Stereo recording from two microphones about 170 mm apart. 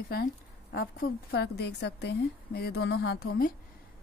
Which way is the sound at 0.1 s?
65° left (ahead or behind).